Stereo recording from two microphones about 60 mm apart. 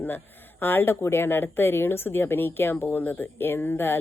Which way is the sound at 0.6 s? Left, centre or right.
Left.